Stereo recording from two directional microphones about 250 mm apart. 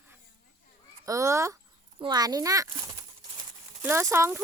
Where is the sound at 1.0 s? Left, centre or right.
Centre.